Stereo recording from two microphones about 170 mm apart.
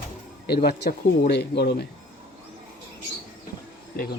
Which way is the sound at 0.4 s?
70° left (ahead or behind).